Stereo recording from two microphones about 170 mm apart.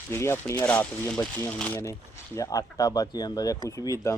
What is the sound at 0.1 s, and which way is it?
Speech, 15° left (ahead or behind).